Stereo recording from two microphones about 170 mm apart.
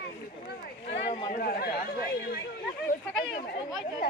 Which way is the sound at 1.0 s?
30° left (ahead or behind).